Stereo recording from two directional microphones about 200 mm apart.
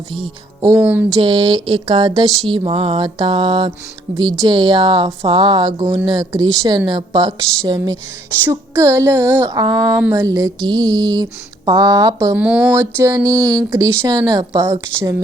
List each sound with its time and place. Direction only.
0.7 s speech: 10° right (ahead or behind)
1.2 s speech: 25° right (ahead or behind)
12.4 s speech: 5° right (ahead or behind)